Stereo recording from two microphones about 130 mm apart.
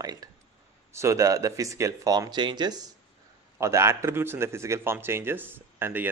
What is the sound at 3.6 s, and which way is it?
Speech, 20° right (ahead or behind).